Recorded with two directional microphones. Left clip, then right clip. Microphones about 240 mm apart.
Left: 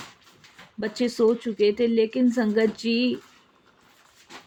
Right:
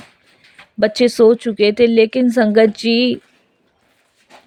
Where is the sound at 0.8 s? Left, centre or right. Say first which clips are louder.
Right 11 dB; right.